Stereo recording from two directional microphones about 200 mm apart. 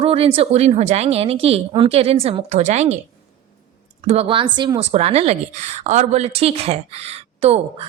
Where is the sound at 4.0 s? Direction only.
30° right (ahead or behind).